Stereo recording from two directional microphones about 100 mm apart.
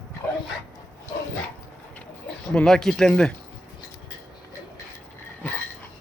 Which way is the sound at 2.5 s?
5° left (ahead or behind).